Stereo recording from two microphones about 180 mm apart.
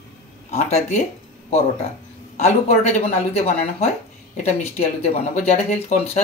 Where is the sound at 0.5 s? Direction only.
35° left (ahead or behind).